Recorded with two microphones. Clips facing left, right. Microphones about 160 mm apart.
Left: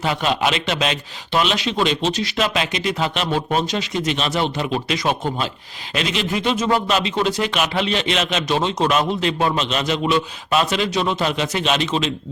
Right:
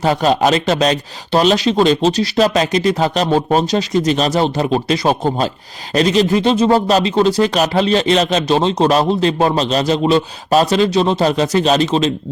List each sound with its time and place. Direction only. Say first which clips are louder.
0.0 s speech: right 7 dB; 40° right (ahead or behind)